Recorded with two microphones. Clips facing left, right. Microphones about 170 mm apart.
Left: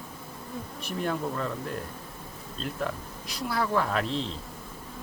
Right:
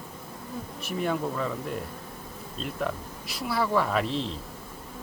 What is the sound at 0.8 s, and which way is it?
Speech, centre (ahead or behind).